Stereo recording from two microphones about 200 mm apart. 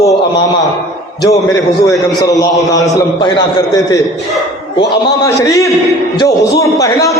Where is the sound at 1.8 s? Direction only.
15° left (ahead or behind).